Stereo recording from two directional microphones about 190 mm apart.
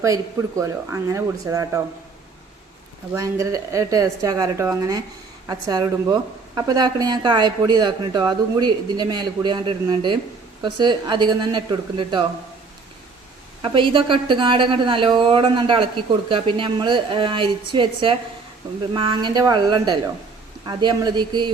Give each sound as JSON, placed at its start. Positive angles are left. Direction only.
{"t": 0.0, "sound": "a woman's voice", "side_deg": -15}
{"t": 3.2, "sound": "a woman's voice", "side_deg": -15}
{"t": 13.6, "sound": "speech", "side_deg": -25}